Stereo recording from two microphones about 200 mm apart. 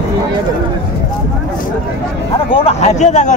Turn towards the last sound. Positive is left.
turn(degrees=35)  # may be behind; listen again after turning